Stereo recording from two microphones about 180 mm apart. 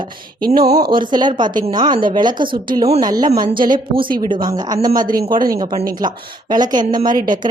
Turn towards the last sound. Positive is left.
turn(degrees=-25)  # may be behind; listen again after turning